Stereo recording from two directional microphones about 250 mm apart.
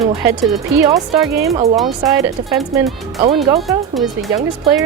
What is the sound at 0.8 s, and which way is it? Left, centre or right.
Speech, centre.